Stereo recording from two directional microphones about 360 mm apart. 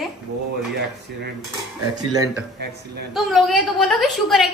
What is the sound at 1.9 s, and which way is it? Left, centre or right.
Speech, centre.